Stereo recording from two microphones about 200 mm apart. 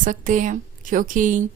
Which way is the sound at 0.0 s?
40° right (ahead or behind).